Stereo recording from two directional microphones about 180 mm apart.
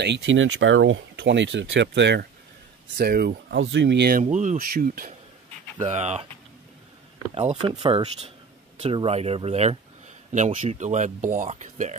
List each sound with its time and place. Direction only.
0.0 s speech: 80° right
3.0 s speech: 60° right (ahead or behind)
4.2 s speech: 40° right (ahead or behind)
7.3 s speech: 30° right (ahead or behind)